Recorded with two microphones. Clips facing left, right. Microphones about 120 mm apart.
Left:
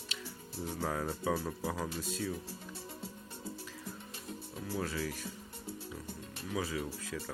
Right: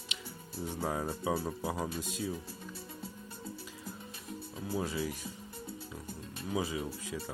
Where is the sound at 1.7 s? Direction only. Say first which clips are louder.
Right 1 dB; 20° right (ahead or behind).